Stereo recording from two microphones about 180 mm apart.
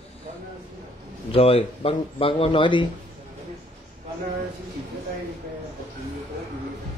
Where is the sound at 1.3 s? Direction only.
35° left (ahead or behind).